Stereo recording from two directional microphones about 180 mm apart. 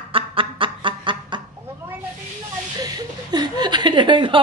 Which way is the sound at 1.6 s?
10° right (ahead or behind).